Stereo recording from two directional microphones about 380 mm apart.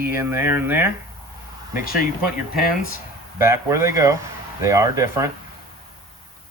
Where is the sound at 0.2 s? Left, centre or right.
Centre.